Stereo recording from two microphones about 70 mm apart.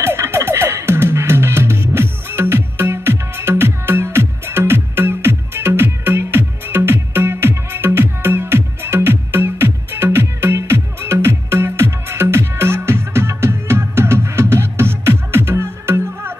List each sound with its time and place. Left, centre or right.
0.0 s music: right